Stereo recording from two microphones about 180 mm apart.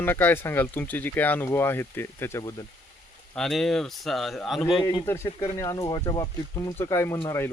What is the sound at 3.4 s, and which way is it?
A man's voice, centre (ahead or behind).